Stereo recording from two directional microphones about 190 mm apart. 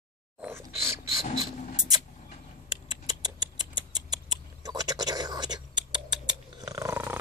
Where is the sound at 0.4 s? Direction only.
10° right (ahead or behind).